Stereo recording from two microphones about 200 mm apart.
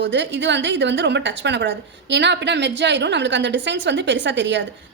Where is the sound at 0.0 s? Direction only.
65° right (ahead or behind).